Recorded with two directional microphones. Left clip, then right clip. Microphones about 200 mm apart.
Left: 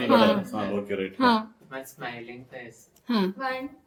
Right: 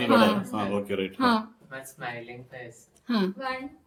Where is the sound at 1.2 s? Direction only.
5° left (ahead or behind).